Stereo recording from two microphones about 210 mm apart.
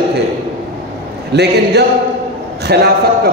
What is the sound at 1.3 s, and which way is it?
Speech, 55° right (ahead or behind).